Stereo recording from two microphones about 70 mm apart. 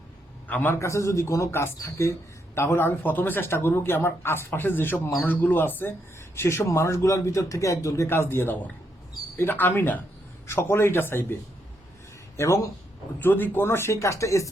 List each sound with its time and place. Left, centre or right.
0.4 s a man's voice: left
0.7 s a man's voice: left
1.5 s speech: left
6.3 s a man's voice: left
8.0 s speech: left
12.4 s a man's voice: left
13.1 s speech: left